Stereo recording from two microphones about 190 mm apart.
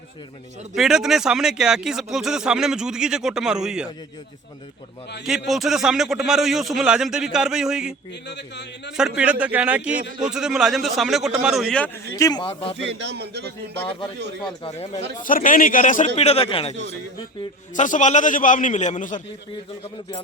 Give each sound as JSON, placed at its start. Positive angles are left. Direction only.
{"t": 0.8, "sound": "speech", "side_deg": -5}
{"t": 5.5, "sound": "speech", "side_deg": 0}
{"t": 9.0, "sound": "a man's voice", "side_deg": -5}
{"t": 12.1, "sound": "speech", "side_deg": 20}
{"t": 12.8, "sound": "a man's voice", "side_deg": -65}
{"t": 14.6, "sound": "a man's voice", "side_deg": 35}
{"t": 15.2, "sound": "a man's voice", "side_deg": 45}
{"t": 17.7, "sound": "a man's voice", "side_deg": 40}